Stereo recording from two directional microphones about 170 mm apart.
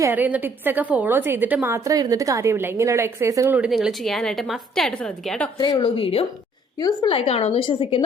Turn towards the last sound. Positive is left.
turn(degrees=30)  # may be behind; listen again after turning